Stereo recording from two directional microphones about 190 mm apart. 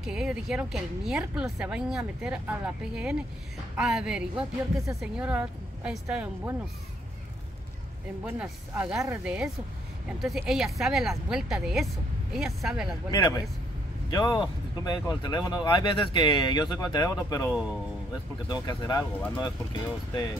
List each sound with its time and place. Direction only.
0.0 s speech: 5° right (ahead or behind)
8.3 s speech: 5° right (ahead or behind)
13.1 s speech: 20° left (ahead or behind)
17.5 s speech: 5° right (ahead or behind)
18.5 s speech: 20° left (ahead or behind)